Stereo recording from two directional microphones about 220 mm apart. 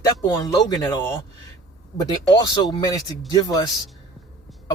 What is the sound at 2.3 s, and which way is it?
A man's voice, 20° left (ahead or behind).